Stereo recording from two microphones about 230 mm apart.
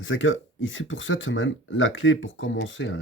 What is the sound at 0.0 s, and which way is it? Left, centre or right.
Speech, left.